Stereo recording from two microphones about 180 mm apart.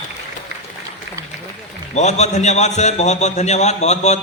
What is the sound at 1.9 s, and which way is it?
A man's voice, 40° left (ahead or behind).